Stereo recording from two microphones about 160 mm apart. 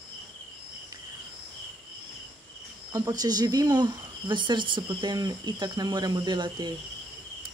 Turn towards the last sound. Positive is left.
turn(degrees=-25)  # may be behind; listen again after turning